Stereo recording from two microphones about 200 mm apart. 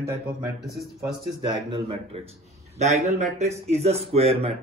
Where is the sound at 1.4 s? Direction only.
25° right (ahead or behind).